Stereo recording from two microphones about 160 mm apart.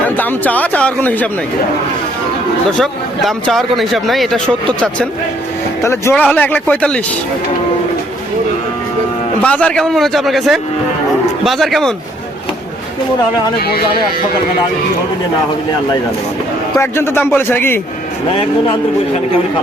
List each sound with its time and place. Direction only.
0.2 s speech: 10° left (ahead or behind)
2.7 s speech: 5° left (ahead or behind)
9.4 s speech: 10° left (ahead or behind)
13.6 s speech: 75° left (ahead or behind)
16.7 s speech: 15° left (ahead or behind)